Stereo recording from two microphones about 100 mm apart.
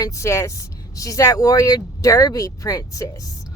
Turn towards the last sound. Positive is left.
turn(degrees=35)  # may be behind; listen again after turning